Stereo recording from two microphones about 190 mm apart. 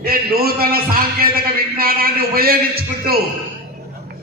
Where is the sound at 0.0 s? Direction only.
50° right (ahead or behind).